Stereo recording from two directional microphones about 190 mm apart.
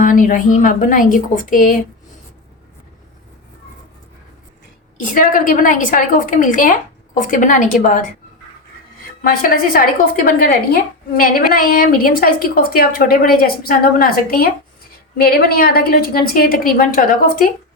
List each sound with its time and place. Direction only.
0.0 s a woman's voice: 45° left (ahead or behind)
5.1 s a woman's voice: 45° left (ahead or behind)
9.2 s a woman's voice: 50° left (ahead or behind)